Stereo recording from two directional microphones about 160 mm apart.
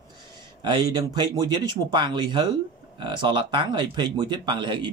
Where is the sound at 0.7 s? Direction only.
25° right (ahead or behind).